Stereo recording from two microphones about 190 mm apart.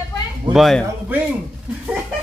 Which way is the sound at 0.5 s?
Centre (ahead or behind).